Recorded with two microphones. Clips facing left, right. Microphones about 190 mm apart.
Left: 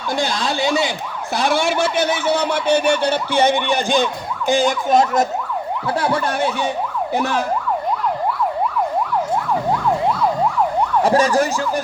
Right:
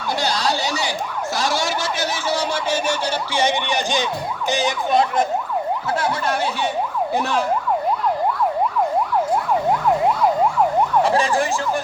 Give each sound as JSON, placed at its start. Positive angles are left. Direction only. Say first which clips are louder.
{"t": 0.2, "sound": "a sound", "louder": "left 2 dB", "side_deg": 50}
{"t": 1.3, "sound": "speech", "louder": "left 5 dB", "side_deg": 60}
{"t": 11.0, "sound": "emergency vehicle", "louder": "left 3 dB", "side_deg": 40}